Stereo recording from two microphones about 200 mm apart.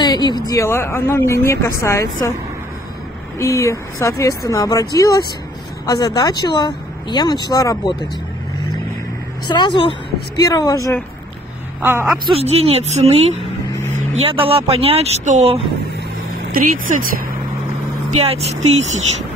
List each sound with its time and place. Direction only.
0.0 s a sound: 20° left (ahead or behind)
0.5 s speech: 15° left (ahead or behind)
3.3 s speech: 15° left (ahead or behind)
9.5 s speech: 20° left (ahead or behind)
11.8 s a woman's voice: 10° right (ahead or behind)
12.3 s a woman's voice: 30° right (ahead or behind)
16.5 s speech: 45° right (ahead or behind)
18.2 s a woman's voice: 30° right (ahead or behind)